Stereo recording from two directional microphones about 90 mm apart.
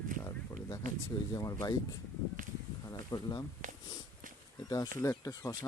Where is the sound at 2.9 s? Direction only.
45° left (ahead or behind).